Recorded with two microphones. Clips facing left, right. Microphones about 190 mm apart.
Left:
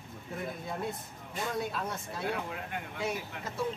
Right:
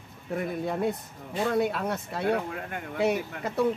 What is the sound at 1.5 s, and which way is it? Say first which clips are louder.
Speech: right 8 dB; 65° right (ahead or behind).